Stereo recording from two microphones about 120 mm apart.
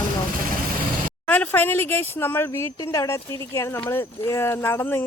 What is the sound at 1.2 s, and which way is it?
Speech, 15° left (ahead or behind).